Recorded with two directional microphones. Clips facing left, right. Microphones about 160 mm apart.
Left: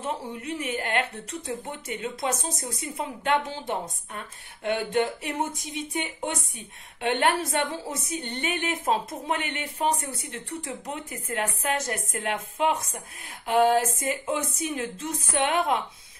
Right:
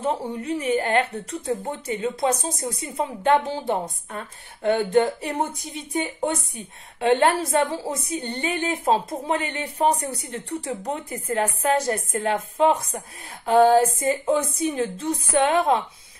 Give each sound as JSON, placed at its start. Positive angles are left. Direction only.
{"t": 0.0, "sound": "a woman's voice", "side_deg": -35}
{"t": 7.0, "sound": "a woman's voice", "side_deg": -35}